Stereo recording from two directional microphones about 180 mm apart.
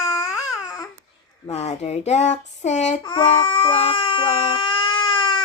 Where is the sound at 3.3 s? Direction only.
30° left (ahead or behind).